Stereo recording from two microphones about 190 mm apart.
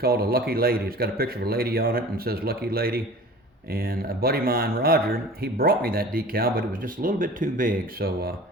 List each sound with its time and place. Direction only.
0.0 s speech: 55° right (ahead or behind)